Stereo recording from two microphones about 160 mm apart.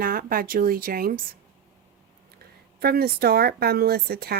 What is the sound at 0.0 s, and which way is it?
A woman's voice, 65° right (ahead or behind).